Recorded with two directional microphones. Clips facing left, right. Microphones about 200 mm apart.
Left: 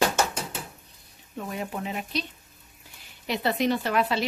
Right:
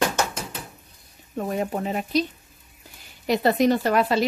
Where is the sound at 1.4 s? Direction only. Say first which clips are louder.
Right 7 dB; 40° right (ahead or behind).